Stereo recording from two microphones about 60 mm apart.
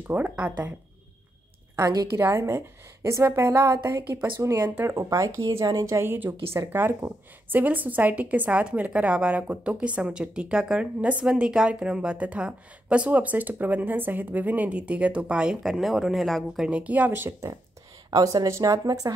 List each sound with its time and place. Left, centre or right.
0.1 s a woman's voice: right
2.1 s a woman's voice: right
5.9 s a woman's voice: right; by 15.5 s centre
15.6 s speech: centre
16.6 s a woman's voice: right
18.1 s speech: right